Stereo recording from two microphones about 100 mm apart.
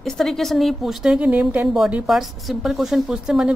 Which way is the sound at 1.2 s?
15° right (ahead or behind).